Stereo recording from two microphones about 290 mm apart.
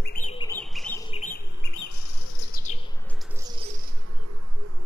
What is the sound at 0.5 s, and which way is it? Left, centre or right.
Bird, centre.